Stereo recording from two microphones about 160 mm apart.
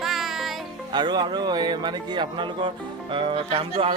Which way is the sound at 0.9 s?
25° right (ahead or behind).